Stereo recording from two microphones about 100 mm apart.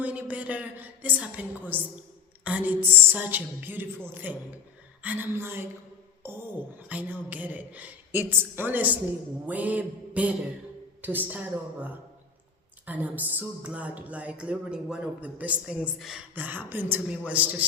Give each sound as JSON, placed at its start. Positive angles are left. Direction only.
{"t": 0.0, "sound": "a woman's voice", "side_deg": -15}
{"t": 16.3, "sound": "speech", "side_deg": -15}